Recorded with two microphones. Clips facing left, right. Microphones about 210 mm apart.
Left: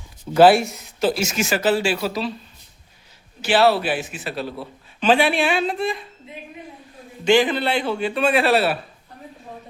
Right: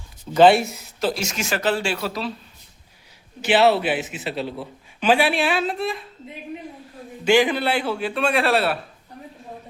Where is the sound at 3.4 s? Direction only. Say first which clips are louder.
Even; 20° right (ahead or behind); by 6.0 s centre (ahead or behind).